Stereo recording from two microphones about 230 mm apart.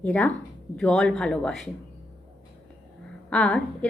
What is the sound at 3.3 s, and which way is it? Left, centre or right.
Speech, centre.